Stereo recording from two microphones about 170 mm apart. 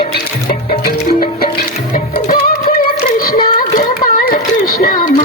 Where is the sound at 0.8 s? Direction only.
60° left (ahead or behind).